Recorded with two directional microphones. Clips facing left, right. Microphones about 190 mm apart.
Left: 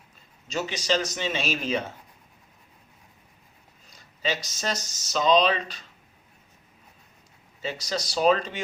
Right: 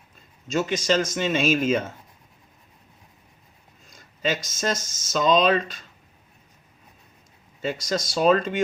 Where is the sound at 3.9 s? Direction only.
50° right (ahead or behind).